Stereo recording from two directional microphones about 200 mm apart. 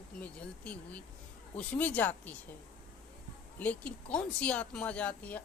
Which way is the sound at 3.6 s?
5° left (ahead or behind).